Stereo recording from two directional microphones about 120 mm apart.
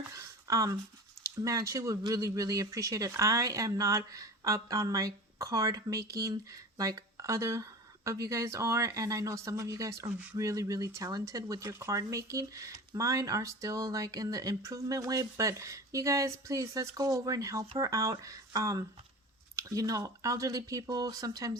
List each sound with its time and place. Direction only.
0.1 s a sound: 25° right (ahead or behind)
1.4 s speech: 30° right (ahead or behind)
10.1 s speech: 15° right (ahead or behind)
10.3 s speech: 30° right (ahead or behind)